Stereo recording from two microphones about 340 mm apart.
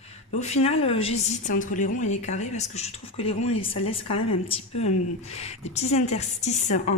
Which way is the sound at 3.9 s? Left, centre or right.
Centre.